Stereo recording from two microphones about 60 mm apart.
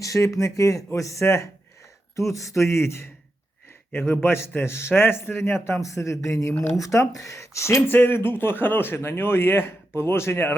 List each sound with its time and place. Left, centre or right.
0.0 s a man's voice: left
5.9 s speech: left
7.9 s speech: left